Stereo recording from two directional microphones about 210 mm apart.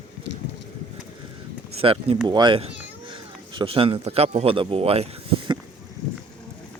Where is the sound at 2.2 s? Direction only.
20° right (ahead or behind).